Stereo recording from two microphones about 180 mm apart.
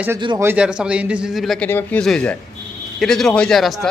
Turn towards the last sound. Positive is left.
turn(degrees=0)  # may be behind; listen again after turning